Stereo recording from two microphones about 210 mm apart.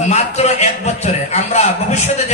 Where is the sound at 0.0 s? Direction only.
30° left (ahead or behind).